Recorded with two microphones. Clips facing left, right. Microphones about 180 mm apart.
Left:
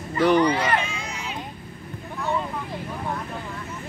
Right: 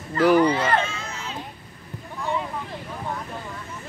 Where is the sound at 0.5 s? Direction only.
15° left (ahead or behind).